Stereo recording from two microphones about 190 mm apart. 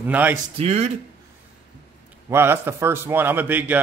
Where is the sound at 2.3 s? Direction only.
10° right (ahead or behind).